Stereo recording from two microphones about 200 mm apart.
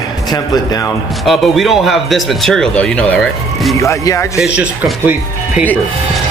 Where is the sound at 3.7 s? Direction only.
15° left (ahead or behind).